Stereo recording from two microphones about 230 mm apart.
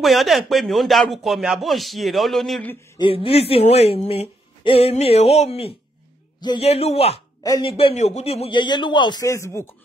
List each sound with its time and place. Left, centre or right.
0.0 s speech: centre
3.0 s speech: left